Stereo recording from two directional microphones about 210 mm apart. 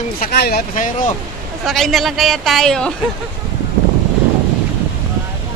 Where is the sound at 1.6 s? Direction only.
Centre (ahead or behind).